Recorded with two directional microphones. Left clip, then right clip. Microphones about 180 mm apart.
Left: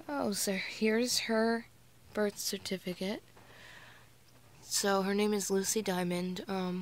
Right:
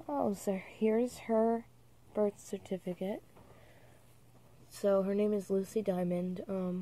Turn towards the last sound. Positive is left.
turn(degrees=15)  # may be behind; listen again after turning